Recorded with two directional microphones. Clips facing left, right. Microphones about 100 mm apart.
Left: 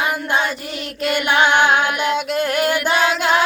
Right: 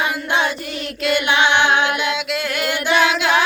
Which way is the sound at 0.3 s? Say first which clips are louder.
Right 2 dB; 45° left (ahead or behind).